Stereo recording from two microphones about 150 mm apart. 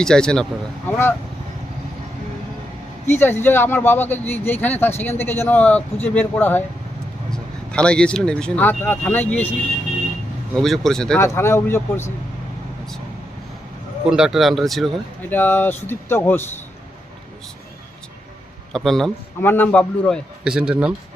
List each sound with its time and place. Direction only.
0.0 s speech: 5° left (ahead or behind)
0.9 s speech: 15° left (ahead or behind)
3.1 s speech: 15° left (ahead or behind)
10.5 s speech: centre (ahead or behind)
11.2 s speech: 15° left (ahead or behind)
14.0 s speech: 5° right (ahead or behind)
15.3 s speech: 15° left (ahead or behind)
18.7 s speech: centre (ahead or behind)
19.4 s speech: 15° left (ahead or behind)
20.4 s speech: 5° right (ahead or behind)